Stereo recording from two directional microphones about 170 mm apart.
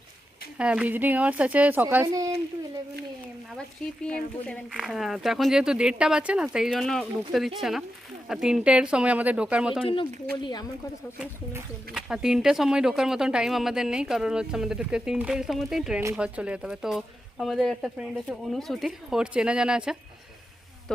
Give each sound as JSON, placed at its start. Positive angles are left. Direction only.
{"t": 0.6, "sound": "speech", "side_deg": -5}
{"t": 4.0, "sound": "speech", "side_deg": 5}
{"t": 9.8, "sound": "a woman's voice", "side_deg": 30}
{"t": 11.9, "sound": "speech", "side_deg": -5}